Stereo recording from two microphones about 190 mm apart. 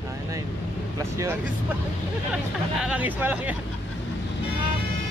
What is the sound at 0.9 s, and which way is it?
Speech, 15° right (ahead or behind).